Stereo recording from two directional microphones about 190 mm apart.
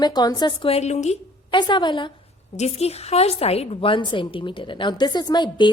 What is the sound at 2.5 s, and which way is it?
A woman's voice, 35° left (ahead or behind).